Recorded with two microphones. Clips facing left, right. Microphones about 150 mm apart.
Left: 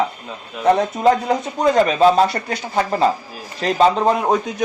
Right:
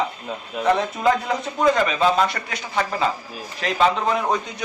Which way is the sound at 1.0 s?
35° left (ahead or behind).